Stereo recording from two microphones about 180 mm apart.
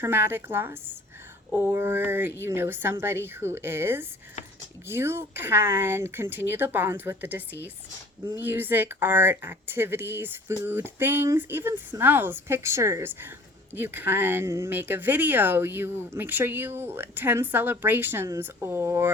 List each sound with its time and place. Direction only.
0.0 s speech: 10° right (ahead or behind)